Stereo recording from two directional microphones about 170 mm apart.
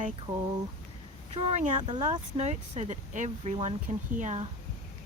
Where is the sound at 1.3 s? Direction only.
40° right (ahead or behind).